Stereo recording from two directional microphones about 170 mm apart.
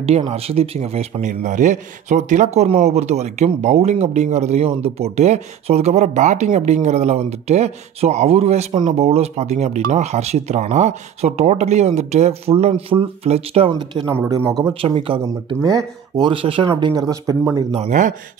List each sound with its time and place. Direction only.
0.3 s a man's voice: 35° right (ahead or behind)
14.1 s speech: 15° right (ahead or behind)
14.7 s a man's voice: 30° right (ahead or behind)
15.2 s speech: 20° right (ahead or behind)
17.8 s speech: 45° right (ahead or behind)